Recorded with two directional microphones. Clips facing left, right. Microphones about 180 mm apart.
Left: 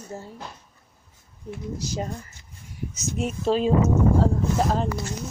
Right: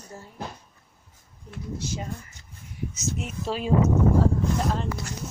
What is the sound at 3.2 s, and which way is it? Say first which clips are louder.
Speech: left 10 dB; 25° left (ahead or behind).